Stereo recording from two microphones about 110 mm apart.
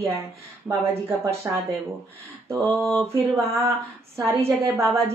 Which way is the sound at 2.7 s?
10° left (ahead or behind).